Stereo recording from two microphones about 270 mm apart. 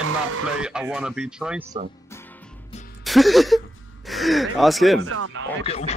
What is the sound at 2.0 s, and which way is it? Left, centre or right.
Music, centre.